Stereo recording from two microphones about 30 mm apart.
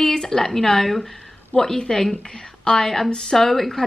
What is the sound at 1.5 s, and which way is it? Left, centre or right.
Speech, left.